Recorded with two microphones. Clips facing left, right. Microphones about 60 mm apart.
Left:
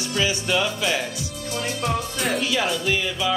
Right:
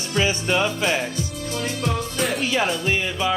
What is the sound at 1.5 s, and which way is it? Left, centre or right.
Music, left.